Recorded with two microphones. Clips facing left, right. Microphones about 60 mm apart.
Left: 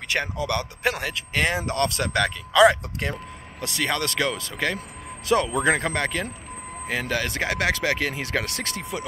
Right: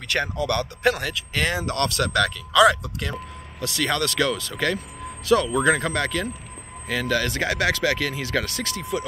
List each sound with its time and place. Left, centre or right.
0.1 s speech: centre